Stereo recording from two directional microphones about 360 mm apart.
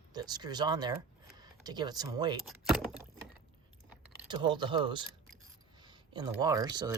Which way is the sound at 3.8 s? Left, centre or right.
Centre.